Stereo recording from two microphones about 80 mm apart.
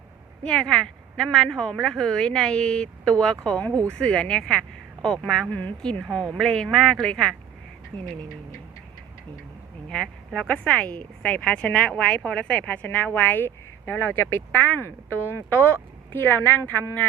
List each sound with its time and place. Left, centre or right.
0.4 s speech: centre
5.5 s speech: centre
9.9 s speech: centre; by 16.8 s left